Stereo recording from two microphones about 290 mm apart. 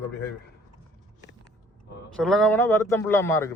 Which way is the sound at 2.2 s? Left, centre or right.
Centre.